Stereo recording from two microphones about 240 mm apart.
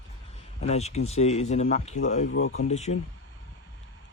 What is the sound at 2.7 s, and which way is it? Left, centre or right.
Speech, left.